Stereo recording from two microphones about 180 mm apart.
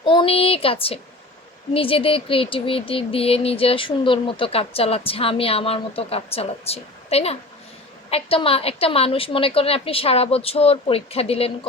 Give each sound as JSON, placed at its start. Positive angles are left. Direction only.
{"t": 0.0, "sound": "speech", "side_deg": 30}